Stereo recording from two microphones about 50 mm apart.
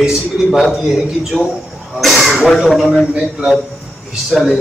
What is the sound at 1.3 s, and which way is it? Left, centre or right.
Speech, centre.